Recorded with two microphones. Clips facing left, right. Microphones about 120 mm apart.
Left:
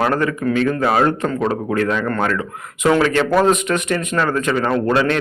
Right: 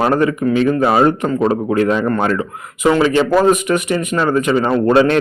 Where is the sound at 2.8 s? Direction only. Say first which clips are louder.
Right 2 dB; 5° right (ahead or behind).